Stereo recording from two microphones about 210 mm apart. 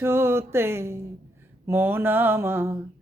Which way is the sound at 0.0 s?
10° right (ahead or behind).